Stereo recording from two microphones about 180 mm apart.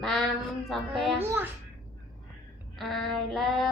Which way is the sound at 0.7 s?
Centre (ahead or behind).